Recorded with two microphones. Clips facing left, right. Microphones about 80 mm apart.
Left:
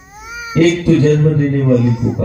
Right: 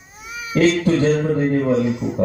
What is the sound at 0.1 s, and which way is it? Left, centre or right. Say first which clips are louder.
Baby cry: left 4 dB; centre.